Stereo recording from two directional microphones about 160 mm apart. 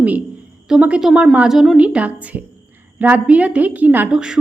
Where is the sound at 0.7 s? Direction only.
5° right (ahead or behind).